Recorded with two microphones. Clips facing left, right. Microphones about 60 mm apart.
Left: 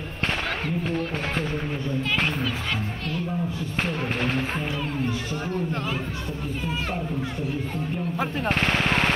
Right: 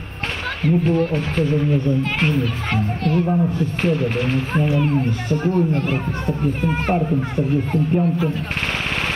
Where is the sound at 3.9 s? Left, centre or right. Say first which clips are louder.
Right 6 dB; left.